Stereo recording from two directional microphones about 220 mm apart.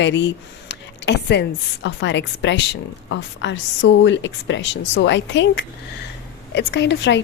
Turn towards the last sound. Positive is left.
turn(degrees=55)  # may be behind; listen again after turning